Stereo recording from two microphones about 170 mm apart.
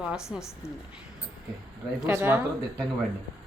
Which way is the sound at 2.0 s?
15° right (ahead or behind).